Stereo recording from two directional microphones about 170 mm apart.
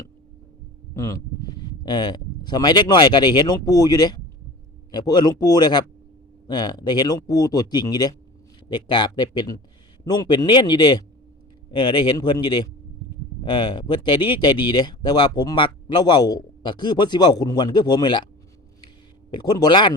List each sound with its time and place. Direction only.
0.9 s speech: 20° left (ahead or behind)
19.3 s speech: 25° left (ahead or behind)